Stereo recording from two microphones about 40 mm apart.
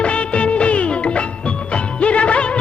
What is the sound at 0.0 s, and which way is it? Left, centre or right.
Music of bollywood, left.